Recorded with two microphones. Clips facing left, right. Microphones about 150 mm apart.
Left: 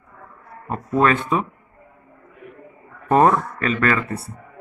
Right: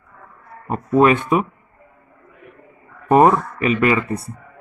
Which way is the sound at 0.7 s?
15° right (ahead or behind).